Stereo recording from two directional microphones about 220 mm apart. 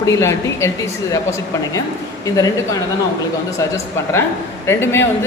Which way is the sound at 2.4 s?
15° left (ahead or behind).